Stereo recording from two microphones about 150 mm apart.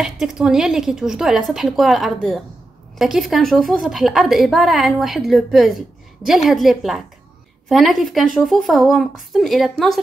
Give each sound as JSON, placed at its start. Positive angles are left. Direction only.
{"t": 0.0, "sound": "a woman's voice", "side_deg": -5}